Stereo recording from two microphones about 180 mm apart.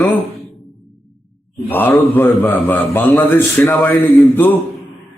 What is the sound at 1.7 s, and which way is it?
A man's voice, 10° left (ahead or behind).